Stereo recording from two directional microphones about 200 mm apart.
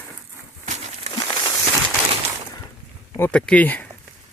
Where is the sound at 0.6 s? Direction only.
35° right (ahead or behind).